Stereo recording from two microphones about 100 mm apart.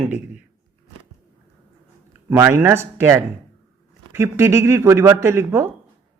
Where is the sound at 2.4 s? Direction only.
20° right (ahead or behind).